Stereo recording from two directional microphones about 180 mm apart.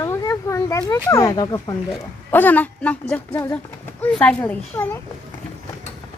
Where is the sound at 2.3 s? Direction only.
10° left (ahead or behind).